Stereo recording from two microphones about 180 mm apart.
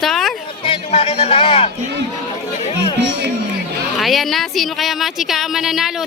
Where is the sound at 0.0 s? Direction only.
Centre (ahead or behind).